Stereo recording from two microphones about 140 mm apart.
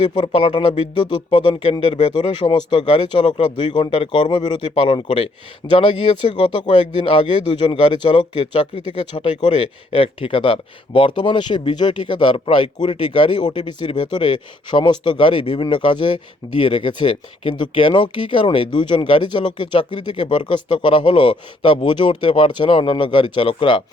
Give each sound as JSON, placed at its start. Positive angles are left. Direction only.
{"t": 0.0, "sound": "a man's voice", "side_deg": 35}